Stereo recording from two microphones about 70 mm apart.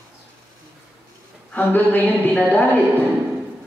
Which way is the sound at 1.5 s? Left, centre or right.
Left.